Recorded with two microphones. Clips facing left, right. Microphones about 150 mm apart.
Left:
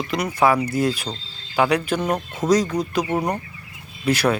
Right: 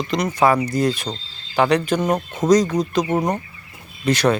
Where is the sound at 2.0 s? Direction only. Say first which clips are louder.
Right 3 dB; 10° right (ahead or behind).